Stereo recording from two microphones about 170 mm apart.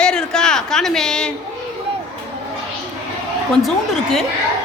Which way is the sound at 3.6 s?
Centre (ahead or behind).